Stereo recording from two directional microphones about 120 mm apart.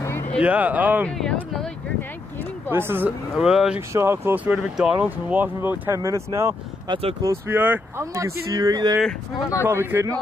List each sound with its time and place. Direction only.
0.4 s speech: 15° right (ahead or behind)
1.0 s speech: 5° left (ahead or behind)
2.7 s speech: 20° right (ahead or behind)
3.3 s speech: 5° right (ahead or behind)
3.9 s speech: 20° right (ahead or behind)
6.9 s speech: 50° right (ahead or behind)
7.4 s speech: 15° right (ahead or behind)
8.1 s speech: 30° right (ahead or behind)
9.6 s speech: 15° right (ahead or behind)